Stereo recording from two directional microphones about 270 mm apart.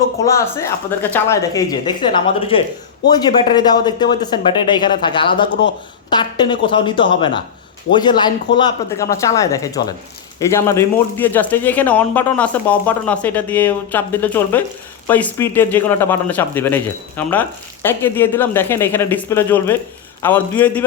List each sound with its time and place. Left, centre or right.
0.3 s speech: centre